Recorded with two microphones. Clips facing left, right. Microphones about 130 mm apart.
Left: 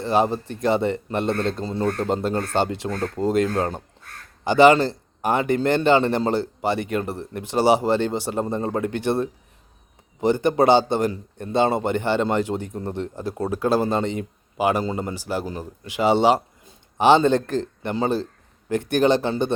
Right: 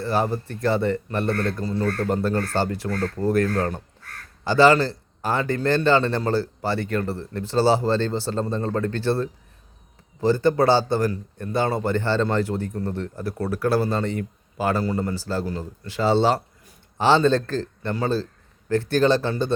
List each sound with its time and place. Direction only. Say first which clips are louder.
0.0 s a man's voice: left 3 dB; 20° left (ahead or behind)